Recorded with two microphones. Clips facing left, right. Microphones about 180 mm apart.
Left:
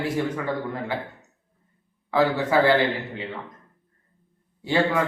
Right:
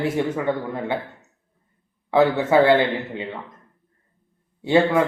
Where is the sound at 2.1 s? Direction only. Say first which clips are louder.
Right 4 dB; 25° right (ahead or behind).